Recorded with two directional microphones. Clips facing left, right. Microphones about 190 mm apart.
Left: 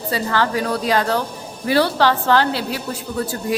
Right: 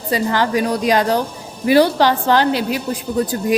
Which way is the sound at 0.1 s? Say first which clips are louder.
Right 3 dB; 15° right (ahead or behind).